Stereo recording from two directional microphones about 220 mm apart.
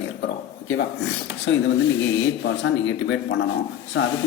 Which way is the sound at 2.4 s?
60° left (ahead or behind).